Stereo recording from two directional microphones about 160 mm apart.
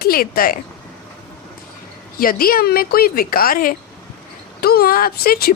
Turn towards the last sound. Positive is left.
turn(degrees=70)  # may be behind; listen again after turning